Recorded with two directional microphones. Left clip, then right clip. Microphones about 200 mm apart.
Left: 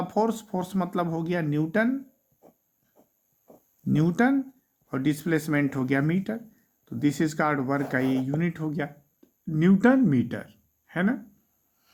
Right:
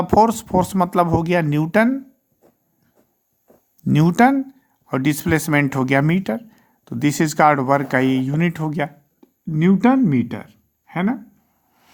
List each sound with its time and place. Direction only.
0.1 s speech: 45° right (ahead or behind)
3.8 s speech: 45° right (ahead or behind)
9.5 s speech: 25° right (ahead or behind)